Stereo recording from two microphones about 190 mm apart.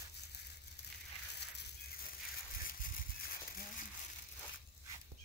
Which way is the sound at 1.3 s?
60° left (ahead or behind).